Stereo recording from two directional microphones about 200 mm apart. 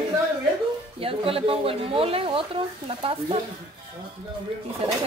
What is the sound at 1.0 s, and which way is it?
Speech, 30° right (ahead or behind).